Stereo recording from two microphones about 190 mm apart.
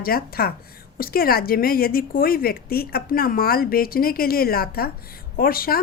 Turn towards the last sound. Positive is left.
turn(degrees=50)  # may be behind; listen again after turning